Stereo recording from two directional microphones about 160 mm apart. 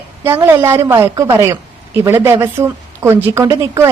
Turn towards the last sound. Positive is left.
turn(degrees=-20)  # may be behind; listen again after turning